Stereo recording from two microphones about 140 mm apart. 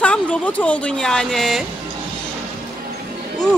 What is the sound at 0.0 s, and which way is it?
Speech, 10° left (ahead or behind).